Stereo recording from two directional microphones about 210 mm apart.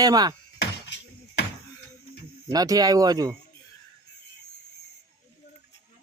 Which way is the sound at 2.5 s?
15° right (ahead or behind).